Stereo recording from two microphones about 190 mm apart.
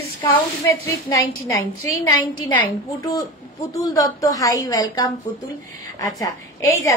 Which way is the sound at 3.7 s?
20° left (ahead or behind).